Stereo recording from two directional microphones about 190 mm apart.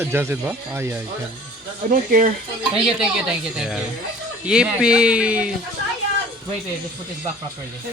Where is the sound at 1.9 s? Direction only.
45° right (ahead or behind).